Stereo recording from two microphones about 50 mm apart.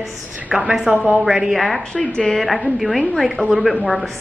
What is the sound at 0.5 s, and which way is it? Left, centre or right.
A woman's voice, centre.